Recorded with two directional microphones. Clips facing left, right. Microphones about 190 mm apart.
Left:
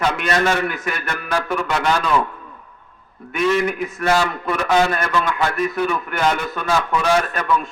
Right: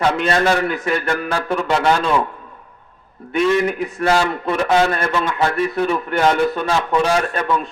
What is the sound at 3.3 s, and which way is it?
A man's voice, 30° right (ahead or behind).